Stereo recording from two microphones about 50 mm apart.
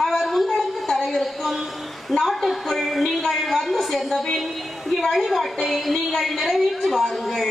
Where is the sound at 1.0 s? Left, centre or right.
Centre.